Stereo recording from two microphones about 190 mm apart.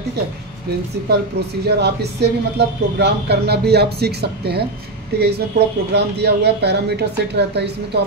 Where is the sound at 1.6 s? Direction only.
60° right (ahead or behind).